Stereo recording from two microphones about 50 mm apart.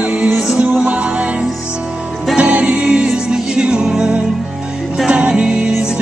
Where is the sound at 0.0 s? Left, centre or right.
Right.